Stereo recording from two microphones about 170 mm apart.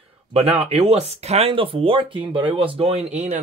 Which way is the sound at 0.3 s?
35° right (ahead or behind).